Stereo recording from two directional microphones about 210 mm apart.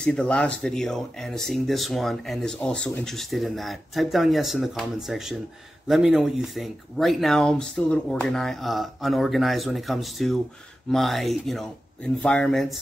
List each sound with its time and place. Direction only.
0.0 s speech: 5° left (ahead or behind)